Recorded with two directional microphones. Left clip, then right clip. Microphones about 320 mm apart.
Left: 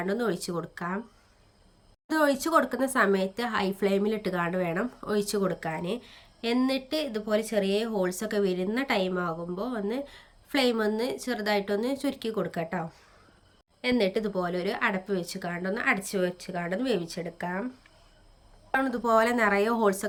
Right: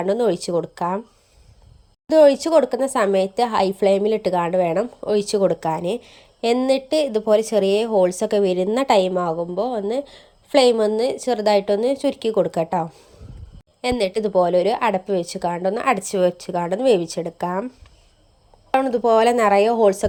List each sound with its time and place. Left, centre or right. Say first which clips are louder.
0.0 s speech: right 10 dB; centre
2.0 s speech: right 12 dB; centre
13.8 s speech: right 6 dB; centre
18.8 s speech: right 8 dB; centre